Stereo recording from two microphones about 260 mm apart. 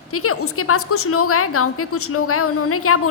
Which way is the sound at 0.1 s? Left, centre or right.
Left.